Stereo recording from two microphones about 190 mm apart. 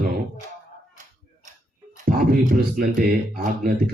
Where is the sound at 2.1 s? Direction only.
50° right (ahead or behind).